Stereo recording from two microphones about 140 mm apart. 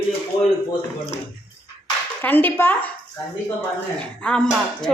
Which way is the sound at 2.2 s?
10° left (ahead or behind).